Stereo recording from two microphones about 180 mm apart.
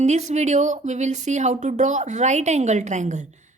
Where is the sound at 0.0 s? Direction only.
40° right (ahead or behind).